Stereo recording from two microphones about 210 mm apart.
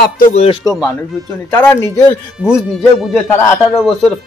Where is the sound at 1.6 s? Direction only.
10° left (ahead or behind).